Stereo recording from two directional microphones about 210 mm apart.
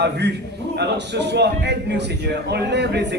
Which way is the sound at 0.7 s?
55° right (ahead or behind).